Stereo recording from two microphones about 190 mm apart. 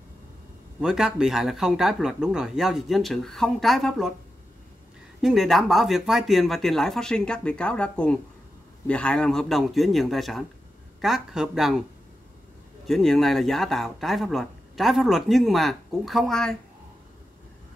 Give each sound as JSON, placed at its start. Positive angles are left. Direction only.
{"t": 0.7, "sound": "speech", "side_deg": -5}
{"t": 5.2, "sound": "speech", "side_deg": 0}
{"t": 12.8, "sound": "speech", "side_deg": 0}